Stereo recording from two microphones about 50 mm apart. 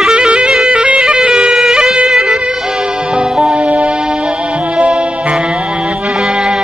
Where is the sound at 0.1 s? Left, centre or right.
Centre.